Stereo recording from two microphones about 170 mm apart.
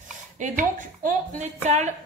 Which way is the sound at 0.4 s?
50° right (ahead or behind).